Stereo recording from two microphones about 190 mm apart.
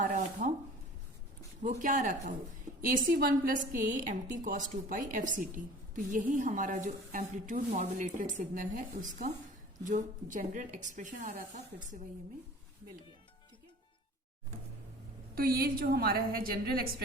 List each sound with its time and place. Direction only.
0.0 s a sound: 45° right (ahead or behind)
1.6 s a woman's voice: 45° right (ahead or behind)
15.4 s speech: 50° right (ahead or behind)